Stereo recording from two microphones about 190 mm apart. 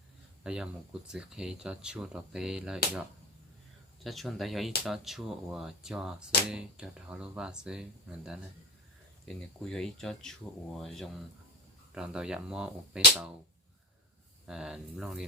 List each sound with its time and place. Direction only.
0.4 s speech: 5° right (ahead or behind)
4.0 s speech: centre (ahead or behind)
14.4 s speech: 5° right (ahead or behind)